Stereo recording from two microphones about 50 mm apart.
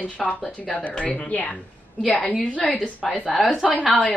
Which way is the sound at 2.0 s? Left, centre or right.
Centre.